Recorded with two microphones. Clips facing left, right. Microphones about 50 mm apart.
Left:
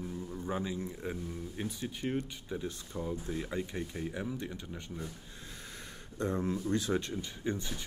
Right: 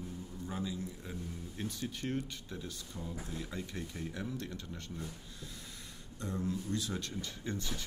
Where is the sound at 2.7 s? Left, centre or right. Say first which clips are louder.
Left 7 dB; left.